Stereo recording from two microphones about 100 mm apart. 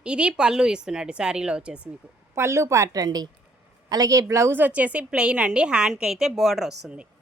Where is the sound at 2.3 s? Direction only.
25° right (ahead or behind).